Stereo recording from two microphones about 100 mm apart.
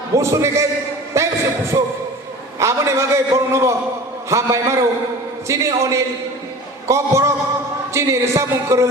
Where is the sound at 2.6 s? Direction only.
30° right (ahead or behind).